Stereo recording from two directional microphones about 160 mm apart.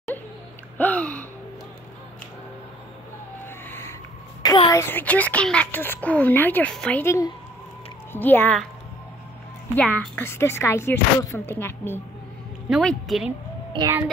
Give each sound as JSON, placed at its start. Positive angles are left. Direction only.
{"t": 0.7, "sound": "a sound", "side_deg": 10}
{"t": 3.4, "sound": "wheeze", "side_deg": 15}
{"t": 4.4, "sound": "a sound", "side_deg": 25}
{"t": 4.8, "sound": "a woman's voice", "side_deg": 10}
{"t": 9.8, "sound": "a woman's voice", "side_deg": 10}
{"t": 12.6, "sound": "a woman's voice", "side_deg": 0}